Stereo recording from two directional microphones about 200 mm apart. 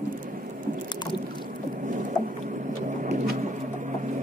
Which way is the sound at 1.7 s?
40° right (ahead or behind).